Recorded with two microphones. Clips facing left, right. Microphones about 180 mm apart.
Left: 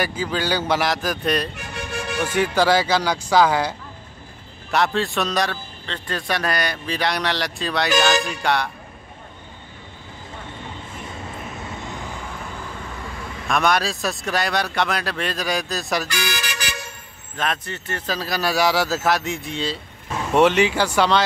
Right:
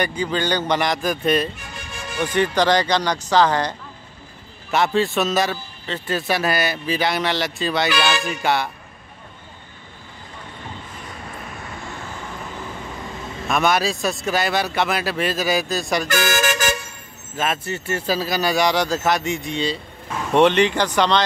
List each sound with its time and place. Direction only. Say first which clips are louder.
0.0 s a man's voice: right 2 dB; 5° left (ahead or behind)
13.5 s a man's voice: right 1 dB; centre (ahead or behind)
16.1 s speech: right 8 dB; 45° right (ahead or behind)
17.4 s a man's voice: right 2 dB; 5° right (ahead or behind)